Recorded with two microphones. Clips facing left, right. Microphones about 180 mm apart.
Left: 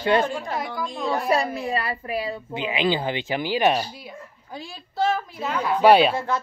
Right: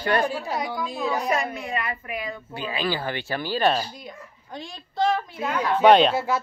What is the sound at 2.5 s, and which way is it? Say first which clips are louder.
Speech: left 4 dB; 20° left (ahead or behind).